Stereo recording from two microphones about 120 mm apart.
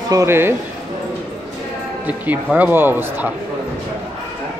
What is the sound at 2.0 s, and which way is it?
Speech, 15° right (ahead or behind).